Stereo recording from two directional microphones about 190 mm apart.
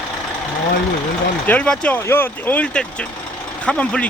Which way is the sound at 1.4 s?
5° left (ahead or behind).